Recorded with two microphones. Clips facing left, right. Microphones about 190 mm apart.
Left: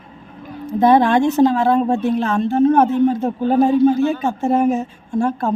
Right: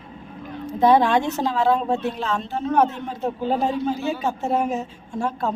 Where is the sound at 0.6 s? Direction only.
50° left (ahead or behind).